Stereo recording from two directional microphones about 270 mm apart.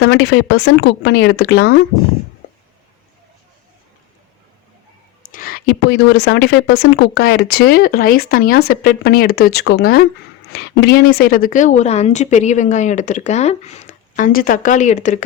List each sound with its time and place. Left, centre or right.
0.0 s speech: left
5.3 s a woman's voice: left